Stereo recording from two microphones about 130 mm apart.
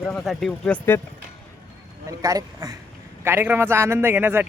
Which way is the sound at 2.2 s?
25° right (ahead or behind).